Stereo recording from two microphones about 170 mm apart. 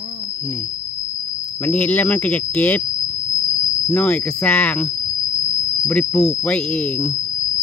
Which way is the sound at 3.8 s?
10° left (ahead or behind).